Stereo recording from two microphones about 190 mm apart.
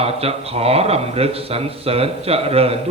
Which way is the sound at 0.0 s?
30° right (ahead or behind).